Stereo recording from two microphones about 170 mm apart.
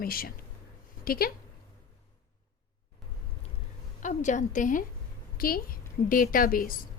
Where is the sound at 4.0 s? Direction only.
45° left (ahead or behind).